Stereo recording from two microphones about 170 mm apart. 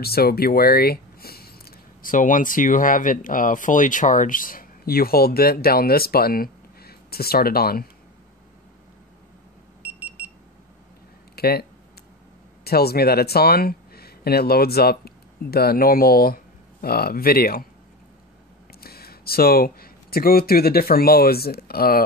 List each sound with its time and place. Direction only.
0.0 s speech: 65° left (ahead or behind)
9.8 s alarm: 10° right (ahead or behind)
11.3 s speech: 65° left (ahead or behind)
12.6 s speech: 65° left (ahead or behind)
18.8 s speech: 65° left (ahead or behind)